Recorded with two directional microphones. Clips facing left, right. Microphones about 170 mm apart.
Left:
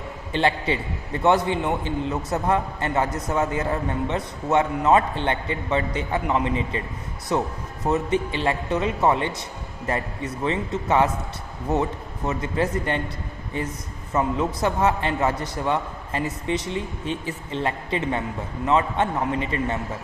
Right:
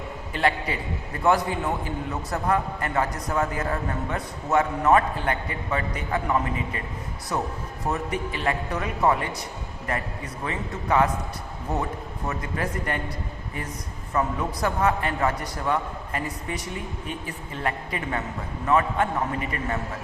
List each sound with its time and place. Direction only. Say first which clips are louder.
0.3 s a man's voice: left 3 dB; 25° left (ahead or behind)
10.4 s a man's voice: left 6 dB; 25° left (ahead or behind)
14.1 s a man's voice: left 3 dB; 20° left (ahead or behind)